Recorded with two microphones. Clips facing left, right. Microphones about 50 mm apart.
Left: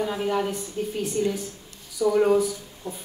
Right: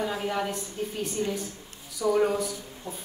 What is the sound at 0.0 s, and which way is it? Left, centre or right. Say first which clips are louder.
A woman's voice: left 4 dB; centre.